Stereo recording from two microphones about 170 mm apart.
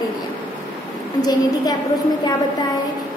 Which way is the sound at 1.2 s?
25° left (ahead or behind).